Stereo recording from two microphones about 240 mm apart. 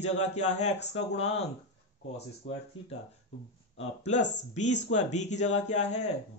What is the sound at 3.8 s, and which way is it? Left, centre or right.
Speech, left.